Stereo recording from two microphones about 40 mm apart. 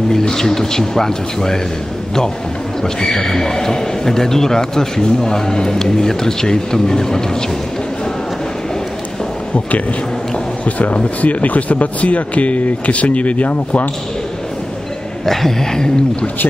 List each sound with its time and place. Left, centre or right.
0.3 s a man's voice: centre
3.2 s a man's voice: centre
10.6 s speech: left
15.2 s a man's voice: centre